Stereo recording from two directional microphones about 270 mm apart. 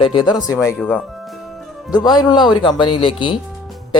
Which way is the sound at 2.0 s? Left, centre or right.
Centre.